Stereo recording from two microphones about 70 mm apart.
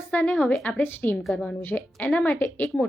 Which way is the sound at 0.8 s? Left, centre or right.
Left.